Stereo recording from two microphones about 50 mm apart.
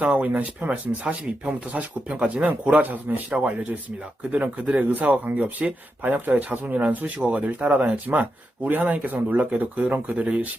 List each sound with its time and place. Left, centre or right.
0.0 s speech: right
4.3 s speech: right